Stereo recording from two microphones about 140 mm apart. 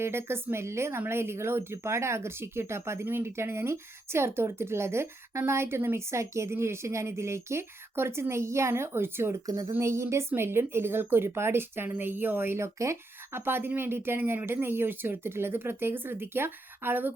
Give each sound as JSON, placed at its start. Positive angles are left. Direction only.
{"t": 0.0, "sound": "speech", "side_deg": -15}